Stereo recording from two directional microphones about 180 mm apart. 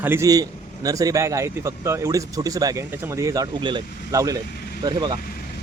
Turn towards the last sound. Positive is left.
turn(degrees=55)  # may be behind; listen again after turning